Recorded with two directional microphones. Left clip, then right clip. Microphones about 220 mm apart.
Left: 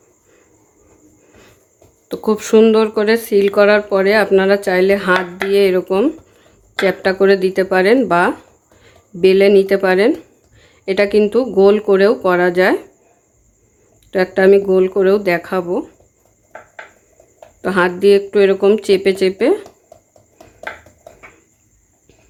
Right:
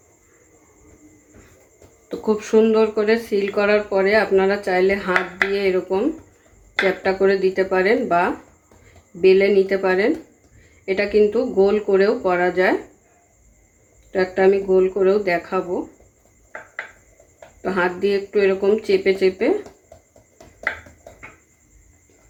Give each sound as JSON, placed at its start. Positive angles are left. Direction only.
{"t": 2.0, "sound": "speech", "side_deg": 40}
{"t": 14.1, "sound": "speech", "side_deg": 50}
{"t": 17.6, "sound": "speech", "side_deg": 50}